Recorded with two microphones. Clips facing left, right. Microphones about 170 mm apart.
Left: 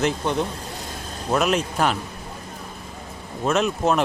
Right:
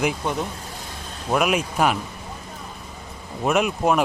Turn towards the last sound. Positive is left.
turn(degrees=-10)  # may be behind; listen again after turning